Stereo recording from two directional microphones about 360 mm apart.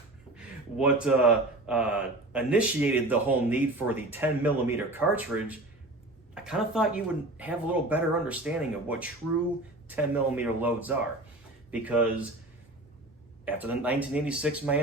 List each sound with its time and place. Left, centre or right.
0.3 s speech: centre
13.4 s speech: centre